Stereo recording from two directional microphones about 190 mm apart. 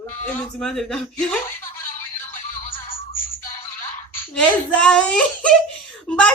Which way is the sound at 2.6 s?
30° left (ahead or behind).